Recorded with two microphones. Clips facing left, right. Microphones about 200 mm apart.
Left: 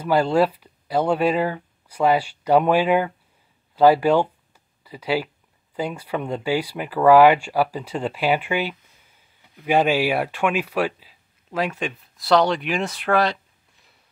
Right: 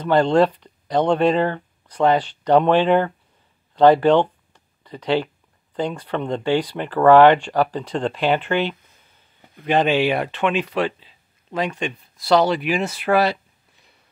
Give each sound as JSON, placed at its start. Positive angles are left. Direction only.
{"t": 0.0, "sound": "speech", "side_deg": 5}